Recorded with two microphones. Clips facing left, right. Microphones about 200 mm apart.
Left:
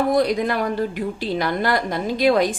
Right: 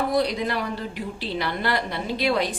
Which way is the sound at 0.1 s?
50° left (ahead or behind).